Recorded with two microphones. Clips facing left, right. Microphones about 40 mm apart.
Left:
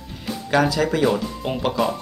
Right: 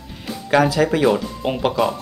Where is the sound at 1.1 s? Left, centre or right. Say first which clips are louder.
Right 3 dB; centre.